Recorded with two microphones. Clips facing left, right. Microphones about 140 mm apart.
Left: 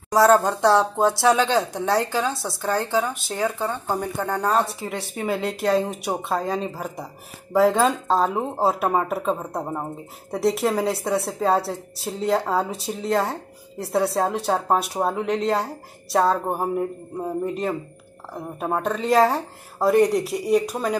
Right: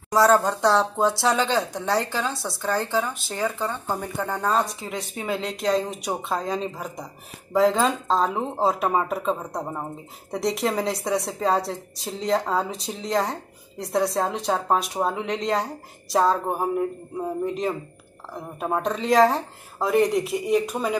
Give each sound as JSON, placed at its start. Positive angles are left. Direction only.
{"t": 0.1, "sound": "speech", "side_deg": 0}
{"t": 1.0, "sound": "speech", "side_deg": 20}
{"t": 1.7, "sound": "speech", "side_deg": 0}